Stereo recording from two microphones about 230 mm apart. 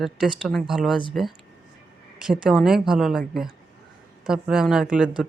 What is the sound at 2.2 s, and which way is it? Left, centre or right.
Speech, centre.